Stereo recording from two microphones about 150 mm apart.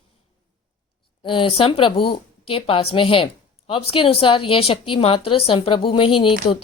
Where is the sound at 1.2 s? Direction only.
35° left (ahead or behind).